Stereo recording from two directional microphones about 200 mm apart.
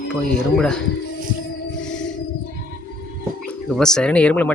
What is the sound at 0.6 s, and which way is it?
Speech, 5° left (ahead or behind).